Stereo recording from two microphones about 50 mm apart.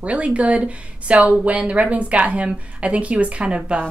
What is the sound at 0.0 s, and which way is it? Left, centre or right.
Speech, right.